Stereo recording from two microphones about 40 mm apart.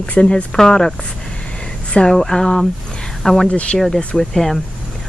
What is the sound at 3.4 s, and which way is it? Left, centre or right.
Speech, left.